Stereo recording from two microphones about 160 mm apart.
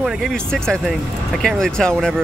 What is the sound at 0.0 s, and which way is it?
Speech, centre (ahead or behind).